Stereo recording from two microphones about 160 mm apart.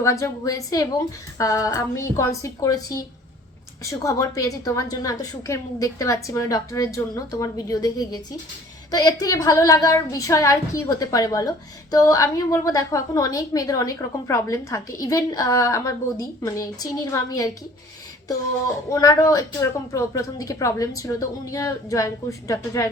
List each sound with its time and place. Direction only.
0.0 s speech: 20° left (ahead or behind)
18.9 s speech: 20° left (ahead or behind)